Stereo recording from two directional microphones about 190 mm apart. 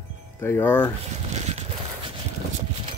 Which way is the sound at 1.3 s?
35° right (ahead or behind).